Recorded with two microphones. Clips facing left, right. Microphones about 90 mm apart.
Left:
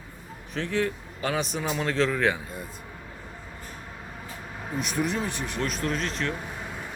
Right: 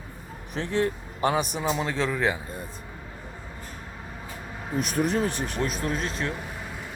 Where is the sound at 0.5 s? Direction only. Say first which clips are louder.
Right 1 dB; 20° right (ahead or behind).